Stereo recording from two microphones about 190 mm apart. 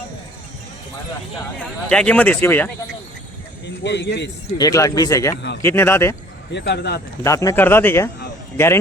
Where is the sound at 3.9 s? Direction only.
65° left (ahead or behind).